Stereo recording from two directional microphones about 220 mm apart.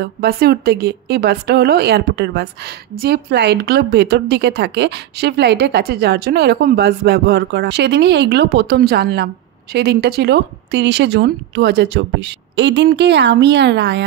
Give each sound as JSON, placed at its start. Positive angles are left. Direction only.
{"t": 0.0, "sound": "a woman's voice", "side_deg": -45}